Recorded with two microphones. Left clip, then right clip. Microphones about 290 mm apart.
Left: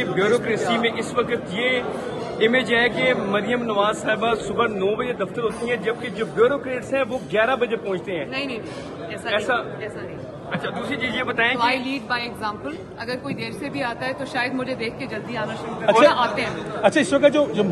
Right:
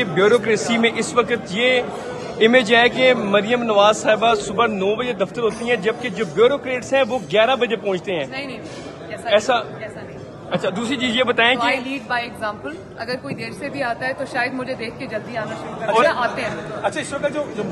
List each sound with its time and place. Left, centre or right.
0.0 s a man's voice: centre
9.3 s a man's voice: centre
13.7 s speech: centre
16.8 s a man's voice: left